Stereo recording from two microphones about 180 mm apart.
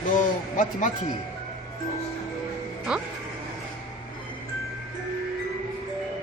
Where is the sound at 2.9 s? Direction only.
5° right (ahead or behind).